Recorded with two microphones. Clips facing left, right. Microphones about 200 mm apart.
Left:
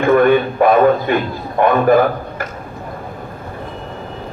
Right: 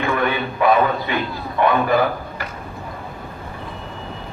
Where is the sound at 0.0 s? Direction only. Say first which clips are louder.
Left 10 dB; 50° left (ahead or behind).